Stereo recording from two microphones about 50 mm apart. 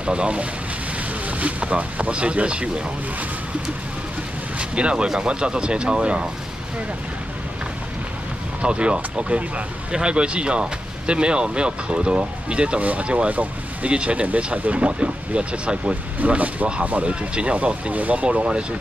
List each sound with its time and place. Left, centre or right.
0.0 s speech: right
4.6 s speech: right
8.6 s speech: right